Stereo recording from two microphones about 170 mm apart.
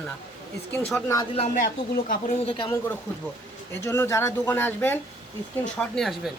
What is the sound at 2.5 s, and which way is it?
Speech, 30° left (ahead or behind).